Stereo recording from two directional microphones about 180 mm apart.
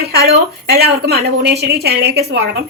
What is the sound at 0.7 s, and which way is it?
A woman's voice, 60° right (ahead or behind).